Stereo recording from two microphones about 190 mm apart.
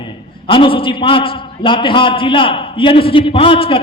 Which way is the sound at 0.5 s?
25° left (ahead or behind).